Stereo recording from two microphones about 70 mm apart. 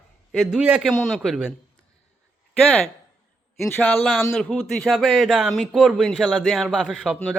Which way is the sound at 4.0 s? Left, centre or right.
Centre.